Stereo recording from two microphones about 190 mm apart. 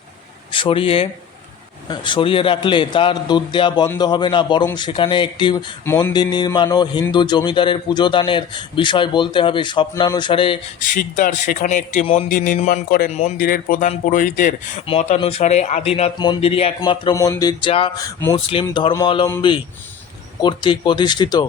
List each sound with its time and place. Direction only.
0.5 s speech: 30° left (ahead or behind)
5.8 s a sound: 10° left (ahead or behind)
6.3 s speech: 25° left (ahead or behind)
10.8 s speech: 40° left (ahead or behind)
13.1 s speech: 35° left (ahead or behind)
13.3 s speech: 50° left (ahead or behind); by 18.3 s 15° left (ahead or behind)
18.3 s speech: 30° left (ahead or behind)